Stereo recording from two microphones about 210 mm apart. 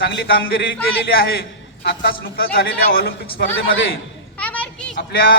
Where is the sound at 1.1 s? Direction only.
45° left (ahead or behind).